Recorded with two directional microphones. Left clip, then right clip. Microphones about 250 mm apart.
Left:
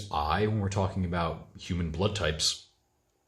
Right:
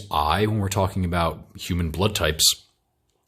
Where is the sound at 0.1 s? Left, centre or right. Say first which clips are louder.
Right 7 dB; right.